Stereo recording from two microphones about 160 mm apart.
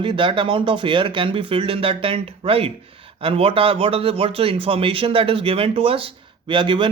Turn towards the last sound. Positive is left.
turn(degrees=-30)  # may be behind; listen again after turning